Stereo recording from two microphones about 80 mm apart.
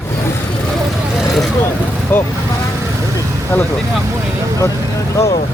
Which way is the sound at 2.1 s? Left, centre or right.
Left.